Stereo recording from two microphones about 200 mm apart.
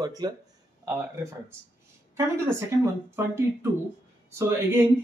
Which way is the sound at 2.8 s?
15° right (ahead or behind).